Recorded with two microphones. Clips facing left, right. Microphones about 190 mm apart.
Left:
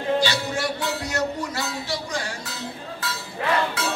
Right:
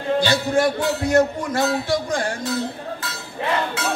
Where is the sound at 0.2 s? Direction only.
50° right (ahead or behind).